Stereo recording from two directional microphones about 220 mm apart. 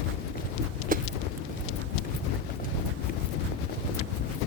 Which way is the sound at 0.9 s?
40° right (ahead or behind).